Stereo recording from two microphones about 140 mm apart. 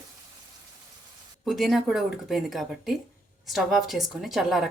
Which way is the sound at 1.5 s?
Centre (ahead or behind).